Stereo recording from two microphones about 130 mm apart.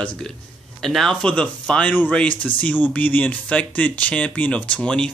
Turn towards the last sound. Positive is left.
turn(degrees=10)  # may be behind; listen again after turning